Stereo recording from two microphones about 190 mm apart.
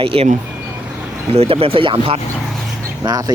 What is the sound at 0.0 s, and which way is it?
Speech, 30° right (ahead or behind).